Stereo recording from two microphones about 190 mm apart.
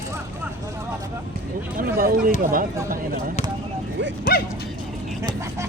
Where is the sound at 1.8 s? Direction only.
50° right (ahead or behind).